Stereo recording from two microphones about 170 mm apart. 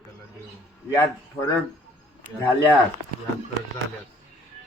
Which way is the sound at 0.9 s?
20° left (ahead or behind).